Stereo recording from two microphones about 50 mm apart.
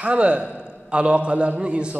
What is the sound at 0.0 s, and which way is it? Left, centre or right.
A man's voice, right.